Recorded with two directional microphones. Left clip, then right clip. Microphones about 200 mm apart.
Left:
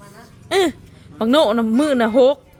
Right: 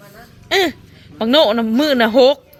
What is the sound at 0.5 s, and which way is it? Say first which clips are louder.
A woman's voice: right 2 dB; 15° left (ahead or behind).